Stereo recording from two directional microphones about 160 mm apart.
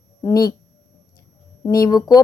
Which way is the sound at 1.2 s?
20° left (ahead or behind).